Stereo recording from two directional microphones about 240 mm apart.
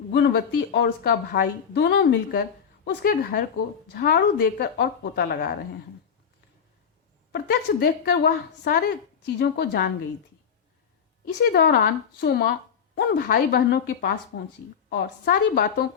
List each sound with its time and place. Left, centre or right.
0.1 s speech: left
7.3 s speech: left
11.4 s speech: left